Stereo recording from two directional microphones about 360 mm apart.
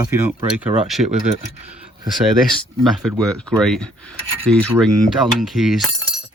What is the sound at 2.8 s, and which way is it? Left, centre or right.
Speech, centre.